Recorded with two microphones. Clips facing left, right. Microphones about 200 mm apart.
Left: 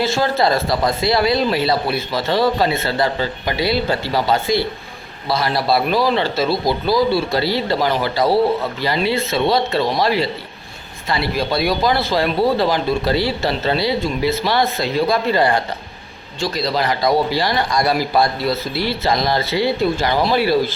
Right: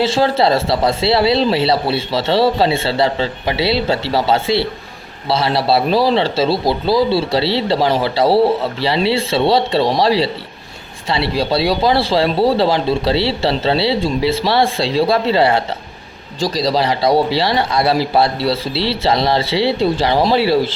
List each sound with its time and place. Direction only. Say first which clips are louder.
0.0 s speech: right 3 dB; 30° right (ahead or behind)
16.4 s speech: right 4 dB; 35° right (ahead or behind)